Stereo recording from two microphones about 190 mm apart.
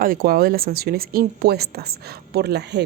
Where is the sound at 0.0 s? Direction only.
50° right (ahead or behind).